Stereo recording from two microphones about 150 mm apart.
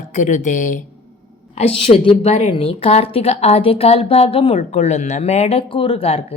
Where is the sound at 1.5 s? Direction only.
40° left (ahead or behind).